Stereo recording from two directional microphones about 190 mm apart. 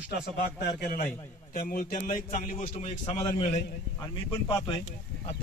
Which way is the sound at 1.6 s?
45° left (ahead or behind).